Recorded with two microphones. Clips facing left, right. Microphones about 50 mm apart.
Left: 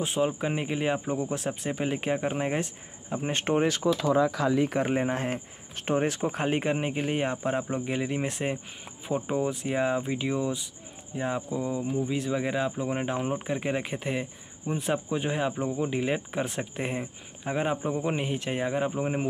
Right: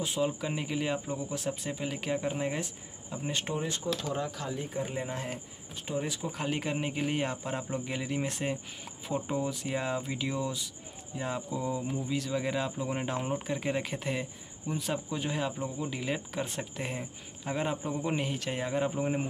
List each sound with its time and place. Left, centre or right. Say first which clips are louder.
0.0 s speech: left 4 dB; left
3.6 s speech: left 9 dB; left
4.9 s speech: left 8 dB; left
5.8 s speech: left 8 dB; left; by 14.2 s centre
14.7 s speech: left 5 dB; left